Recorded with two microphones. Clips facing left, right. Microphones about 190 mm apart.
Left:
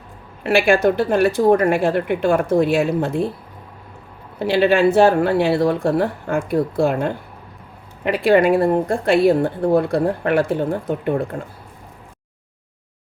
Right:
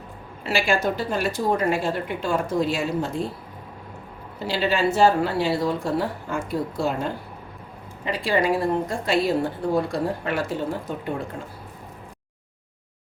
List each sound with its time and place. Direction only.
0.4 s speech: 55° left (ahead or behind)
4.4 s speech: 60° left (ahead or behind)